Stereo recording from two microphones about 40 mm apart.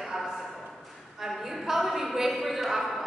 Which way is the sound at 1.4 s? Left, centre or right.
Centre.